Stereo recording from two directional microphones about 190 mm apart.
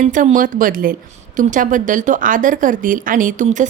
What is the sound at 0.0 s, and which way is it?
A woman's voice, 40° right (ahead or behind).